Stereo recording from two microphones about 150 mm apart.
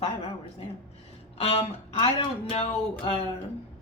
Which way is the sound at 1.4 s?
40° left (ahead or behind).